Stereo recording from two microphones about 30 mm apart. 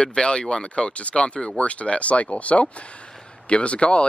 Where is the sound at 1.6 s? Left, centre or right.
Left.